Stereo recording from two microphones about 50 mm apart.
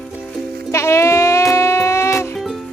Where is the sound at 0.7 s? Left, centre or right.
Left.